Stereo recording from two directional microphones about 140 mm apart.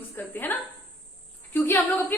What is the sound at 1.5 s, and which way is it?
Speech, 15° left (ahead or behind).